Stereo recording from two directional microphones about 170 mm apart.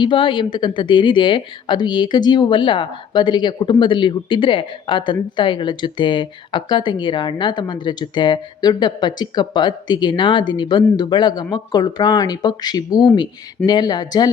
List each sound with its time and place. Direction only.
0.0 s speech: 30° left (ahead or behind)